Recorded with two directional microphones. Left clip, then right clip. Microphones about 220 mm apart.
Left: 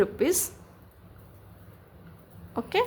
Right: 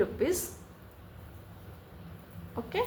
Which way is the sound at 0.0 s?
35° left (ahead or behind).